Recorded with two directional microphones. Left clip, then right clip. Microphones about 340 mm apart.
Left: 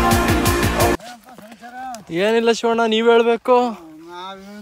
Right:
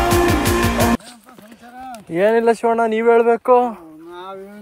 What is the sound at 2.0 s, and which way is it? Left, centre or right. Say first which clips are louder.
Speech: right 2 dB; centre.